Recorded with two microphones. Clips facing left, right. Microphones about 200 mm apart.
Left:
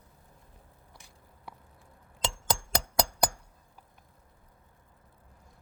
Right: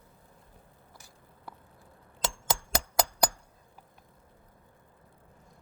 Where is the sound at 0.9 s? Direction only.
Centre (ahead or behind).